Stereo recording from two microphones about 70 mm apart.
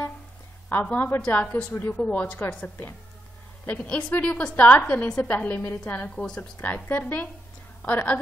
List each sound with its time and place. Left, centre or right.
0.7 s a woman's voice: left
6.6 s a woman's voice: left